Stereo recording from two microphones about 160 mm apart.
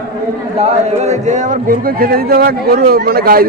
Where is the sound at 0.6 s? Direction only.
45° right (ahead or behind).